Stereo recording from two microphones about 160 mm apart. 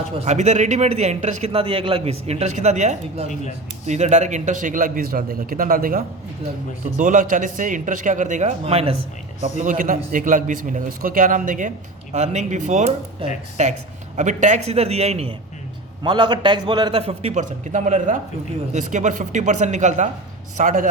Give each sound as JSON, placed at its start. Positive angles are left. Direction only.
{"t": 0.3, "sound": "a man's voice", "side_deg": -45}
{"t": 9.4, "sound": "a man's voice", "side_deg": -50}